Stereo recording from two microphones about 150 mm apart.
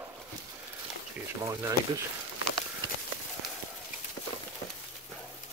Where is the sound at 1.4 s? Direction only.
20° right (ahead or behind).